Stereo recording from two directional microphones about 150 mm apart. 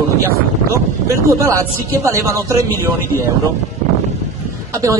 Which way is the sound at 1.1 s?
20° right (ahead or behind).